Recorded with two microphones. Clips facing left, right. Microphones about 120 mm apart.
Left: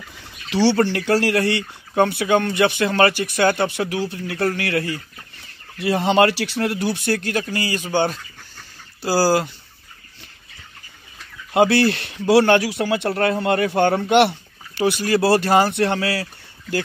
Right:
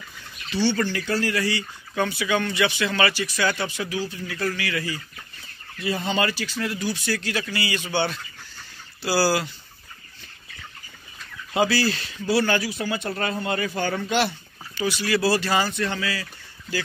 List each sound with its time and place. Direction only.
0.5 s speech: 90° left; by 5.0 s 60° left (ahead or behind)
5.8 s speech: 75° left (ahead or behind); by 9.5 s 45° left (ahead or behind)
11.5 s a man's voice: 60° left (ahead or behind)
14.8 s speech: 50° left (ahead or behind)